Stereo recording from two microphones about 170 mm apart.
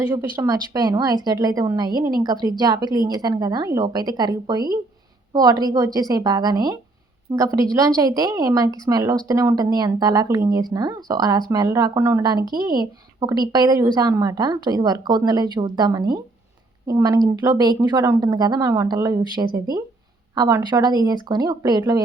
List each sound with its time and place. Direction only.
0.4 s speech: 20° right (ahead or behind)